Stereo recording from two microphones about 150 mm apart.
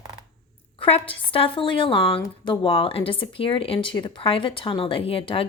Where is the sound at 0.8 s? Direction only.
40° left (ahead or behind).